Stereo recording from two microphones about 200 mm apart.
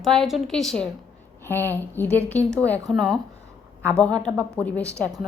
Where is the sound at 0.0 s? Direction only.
Centre (ahead or behind).